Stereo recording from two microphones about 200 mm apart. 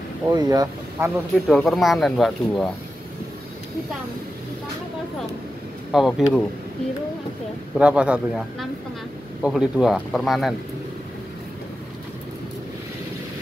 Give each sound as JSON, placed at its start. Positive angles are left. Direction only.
{"t": 0.3, "sound": "speech", "side_deg": -20}
{"t": 1.3, "sound": "speech", "side_deg": 0}
{"t": 5.9, "sound": "speech", "side_deg": 0}
{"t": 7.8, "sound": "speech", "side_deg": -5}